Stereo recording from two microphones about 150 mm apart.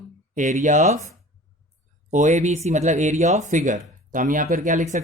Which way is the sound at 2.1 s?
50° right (ahead or behind).